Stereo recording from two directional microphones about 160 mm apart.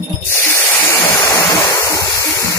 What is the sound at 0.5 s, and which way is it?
Waterfall, 15° left (ahead or behind).